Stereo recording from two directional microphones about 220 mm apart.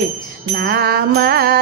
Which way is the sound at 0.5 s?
45° right (ahead or behind).